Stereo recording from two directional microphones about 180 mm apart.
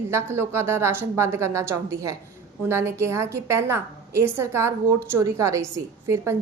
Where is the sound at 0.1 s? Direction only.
15° right (ahead or behind).